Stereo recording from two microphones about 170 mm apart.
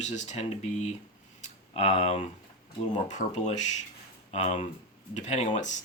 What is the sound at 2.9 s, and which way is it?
Speech, 45° left (ahead or behind).